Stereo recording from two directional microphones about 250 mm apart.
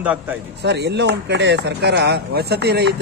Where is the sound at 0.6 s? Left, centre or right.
Right.